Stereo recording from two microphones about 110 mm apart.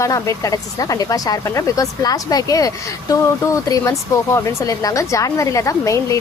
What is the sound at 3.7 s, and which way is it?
Speech, 30° left (ahead or behind).